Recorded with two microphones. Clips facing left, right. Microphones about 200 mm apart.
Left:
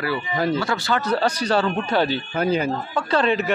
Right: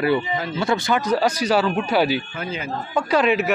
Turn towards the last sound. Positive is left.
turn(degrees=-10)  # may be behind; listen again after turning